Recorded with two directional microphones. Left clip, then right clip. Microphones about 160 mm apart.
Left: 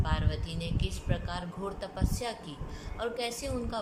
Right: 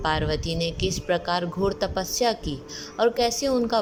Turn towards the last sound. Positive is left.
turn(degrees=-45)  # may be behind; listen again after turning